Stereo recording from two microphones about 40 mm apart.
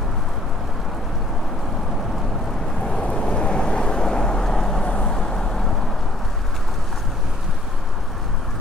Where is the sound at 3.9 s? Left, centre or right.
Centre.